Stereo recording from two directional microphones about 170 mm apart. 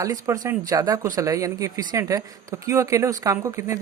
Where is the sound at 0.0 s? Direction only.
20° right (ahead or behind).